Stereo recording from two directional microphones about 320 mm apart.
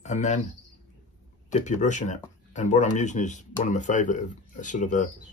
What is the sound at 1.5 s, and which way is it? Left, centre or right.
Speech, left.